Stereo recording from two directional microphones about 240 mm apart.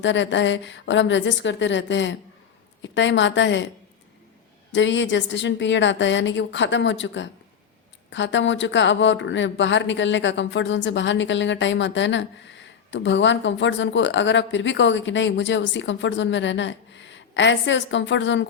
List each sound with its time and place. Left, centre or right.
0.0 s speech: left
4.7 s speech: left